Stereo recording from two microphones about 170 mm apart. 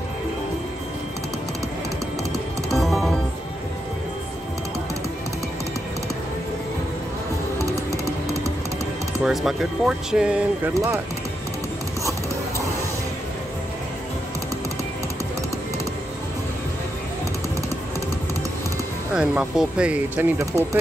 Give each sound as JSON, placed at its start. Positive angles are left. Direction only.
{"t": 2.3, "sound": "music", "side_deg": 0}
{"t": 7.5, "sound": "music", "side_deg": -20}
{"t": 9.2, "sound": "speech", "side_deg": 0}
{"t": 10.7, "sound": "speech", "side_deg": -20}
{"t": 19.1, "sound": "speech", "side_deg": -5}
{"t": 20.2, "sound": "speech", "side_deg": -15}